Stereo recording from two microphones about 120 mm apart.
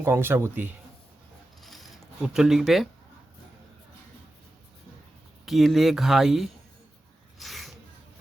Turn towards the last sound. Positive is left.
turn(degrees=0)  # may be behind; listen again after turning